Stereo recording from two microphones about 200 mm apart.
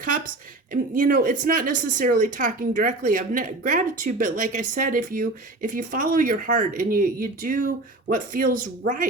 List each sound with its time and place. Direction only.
0.7 s speech: 45° right (ahead or behind)